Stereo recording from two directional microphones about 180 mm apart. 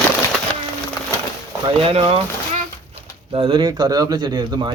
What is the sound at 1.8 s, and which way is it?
Speech, 30° right (ahead or behind).